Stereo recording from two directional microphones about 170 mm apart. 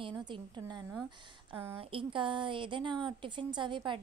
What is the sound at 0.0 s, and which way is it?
Speech, 25° right (ahead or behind).